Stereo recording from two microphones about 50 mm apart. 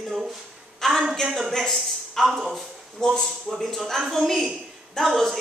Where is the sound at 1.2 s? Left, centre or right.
Centre.